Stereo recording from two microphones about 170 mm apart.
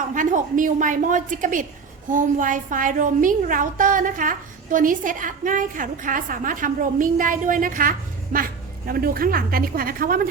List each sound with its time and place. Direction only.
0.1 s a woman's voice: 50° right (ahead or behind)